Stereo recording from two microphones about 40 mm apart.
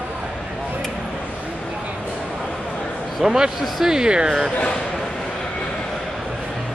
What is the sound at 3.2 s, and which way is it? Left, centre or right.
Speech, centre.